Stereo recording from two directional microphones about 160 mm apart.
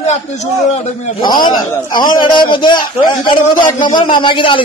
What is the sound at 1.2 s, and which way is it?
Speech, 30° left (ahead or behind).